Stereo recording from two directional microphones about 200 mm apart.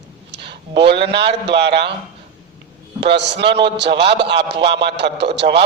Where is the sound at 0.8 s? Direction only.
55° right (ahead or behind).